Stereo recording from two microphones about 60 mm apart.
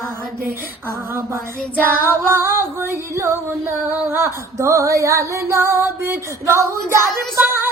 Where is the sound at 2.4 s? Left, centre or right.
Right.